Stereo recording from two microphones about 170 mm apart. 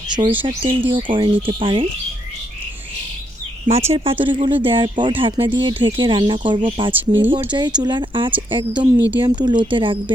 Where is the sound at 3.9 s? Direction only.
35° right (ahead or behind).